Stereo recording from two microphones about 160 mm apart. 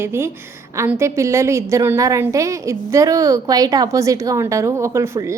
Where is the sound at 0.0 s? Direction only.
15° right (ahead or behind).